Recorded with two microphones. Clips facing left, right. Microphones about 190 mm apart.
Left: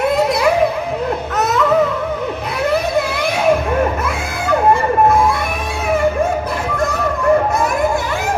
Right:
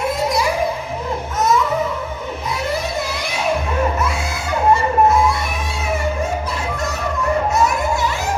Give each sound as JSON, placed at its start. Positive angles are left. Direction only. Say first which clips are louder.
{"t": 0.2, "sound": "music", "louder": "left 4 dB", "side_deg": 60}
{"t": 4.7, "sound": "music", "louder": "right 1 dB", "side_deg": 55}